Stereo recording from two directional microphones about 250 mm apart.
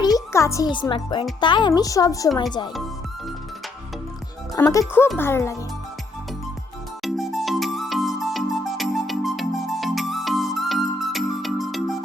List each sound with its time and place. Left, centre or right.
0.0 s a child's voice: centre
4.5 s a woman's voice: centre
7.0 s music: centre